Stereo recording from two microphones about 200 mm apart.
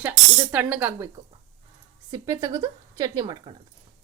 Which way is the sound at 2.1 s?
15° right (ahead or behind).